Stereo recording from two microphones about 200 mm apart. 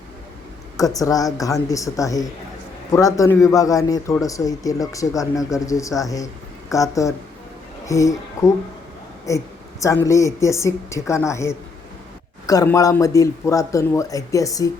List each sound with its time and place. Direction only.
0.8 s speech: 15° left (ahead or behind)
9.3 s speech: 15° left (ahead or behind)